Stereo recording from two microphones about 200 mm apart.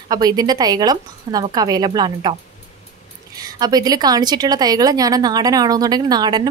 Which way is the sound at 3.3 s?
20° right (ahead or behind).